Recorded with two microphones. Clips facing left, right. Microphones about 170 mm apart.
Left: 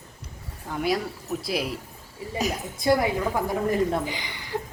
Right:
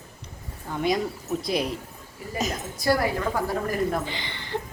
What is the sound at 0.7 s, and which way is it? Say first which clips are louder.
A woman's voice: right 1 dB; 5° left (ahead or behind).